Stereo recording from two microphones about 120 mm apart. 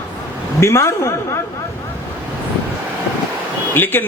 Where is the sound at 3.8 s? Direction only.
15° left (ahead or behind).